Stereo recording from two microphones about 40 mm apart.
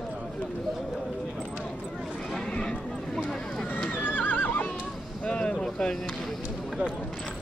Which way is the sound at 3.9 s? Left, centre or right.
Left.